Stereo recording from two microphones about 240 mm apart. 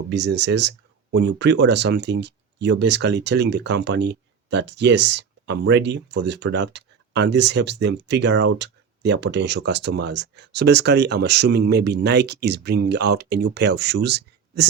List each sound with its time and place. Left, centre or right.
0.1 s speech: right